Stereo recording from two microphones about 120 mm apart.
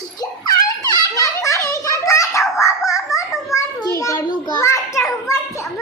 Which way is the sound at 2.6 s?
25° left (ahead or behind).